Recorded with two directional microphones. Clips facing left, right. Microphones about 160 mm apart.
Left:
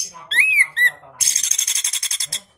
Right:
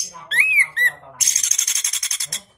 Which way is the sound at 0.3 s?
30° left (ahead or behind).